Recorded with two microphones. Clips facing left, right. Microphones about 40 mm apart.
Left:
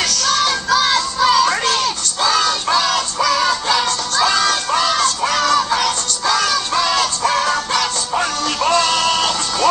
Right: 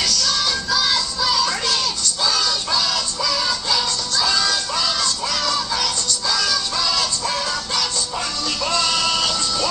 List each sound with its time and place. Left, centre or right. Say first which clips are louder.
0.0 s music: left 4 dB; left